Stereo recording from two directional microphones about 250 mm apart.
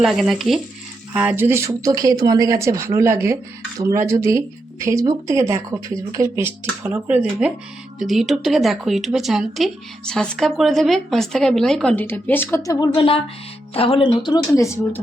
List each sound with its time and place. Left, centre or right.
0.0 s speech: centre